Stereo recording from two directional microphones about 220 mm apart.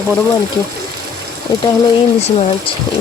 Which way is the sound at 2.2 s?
25° left (ahead or behind).